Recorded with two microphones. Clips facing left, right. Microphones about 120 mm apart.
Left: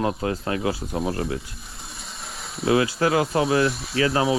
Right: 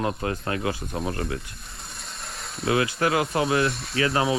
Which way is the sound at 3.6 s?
Centre (ahead or behind).